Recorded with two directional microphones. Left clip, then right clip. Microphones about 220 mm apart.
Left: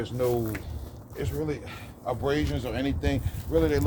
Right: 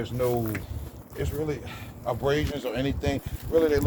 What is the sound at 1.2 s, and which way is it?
A man's voice, 20° right (ahead or behind).